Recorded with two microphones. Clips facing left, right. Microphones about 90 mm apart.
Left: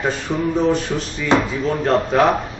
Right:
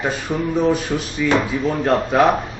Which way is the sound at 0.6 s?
5° right (ahead or behind).